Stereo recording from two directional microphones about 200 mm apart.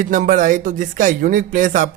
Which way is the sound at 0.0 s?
40° right (ahead or behind).